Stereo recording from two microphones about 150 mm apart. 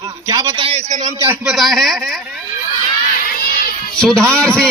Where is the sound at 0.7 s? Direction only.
45° right (ahead or behind).